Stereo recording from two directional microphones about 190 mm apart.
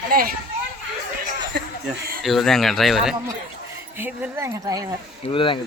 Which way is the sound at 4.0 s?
10° right (ahead or behind).